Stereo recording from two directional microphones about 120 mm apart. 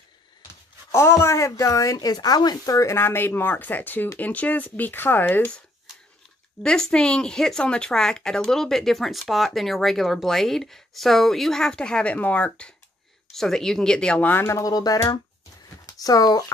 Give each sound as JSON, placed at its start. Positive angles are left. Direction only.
{"t": 0.9, "sound": "speech", "side_deg": 20}
{"t": 6.6, "sound": "speech", "side_deg": 5}